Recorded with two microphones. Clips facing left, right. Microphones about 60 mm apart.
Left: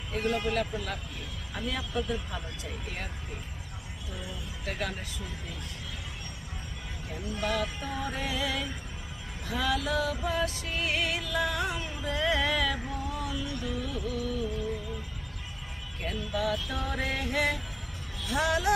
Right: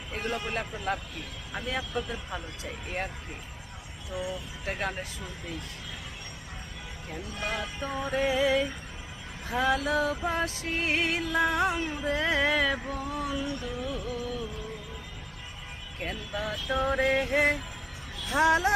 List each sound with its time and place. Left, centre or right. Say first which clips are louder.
0.1 s a man's voice: left 3 dB; right
4.6 s music: right 2 dB; right
7.4 s music: left 2 dB; right
16.0 s music: left 2 dB; right